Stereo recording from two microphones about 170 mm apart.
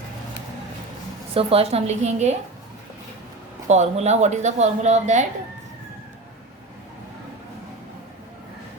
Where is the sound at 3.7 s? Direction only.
40° right (ahead or behind).